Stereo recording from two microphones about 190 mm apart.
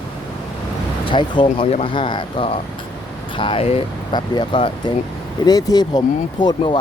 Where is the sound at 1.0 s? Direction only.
25° left (ahead or behind).